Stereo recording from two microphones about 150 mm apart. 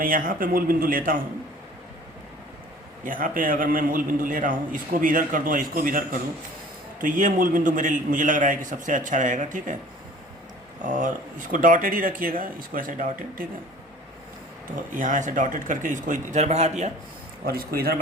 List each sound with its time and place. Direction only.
0.0 s speech: 65° right (ahead or behind)
3.0 s a man's voice: 65° right (ahead or behind)
10.8 s a man's voice: 60° right (ahead or behind)
14.8 s a man's voice: 60° right (ahead or behind)
17.4 s speech: 90° right